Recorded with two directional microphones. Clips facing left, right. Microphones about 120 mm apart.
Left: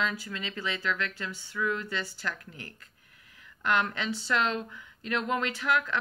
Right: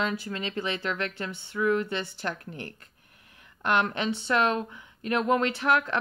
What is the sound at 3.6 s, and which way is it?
Speech, 25° right (ahead or behind).